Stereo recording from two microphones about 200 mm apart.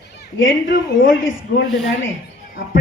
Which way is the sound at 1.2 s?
70° left (ahead or behind).